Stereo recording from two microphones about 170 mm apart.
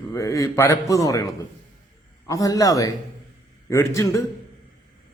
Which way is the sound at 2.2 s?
20° left (ahead or behind).